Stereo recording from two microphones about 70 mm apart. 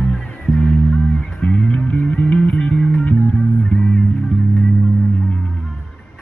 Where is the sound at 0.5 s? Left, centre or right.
Centre.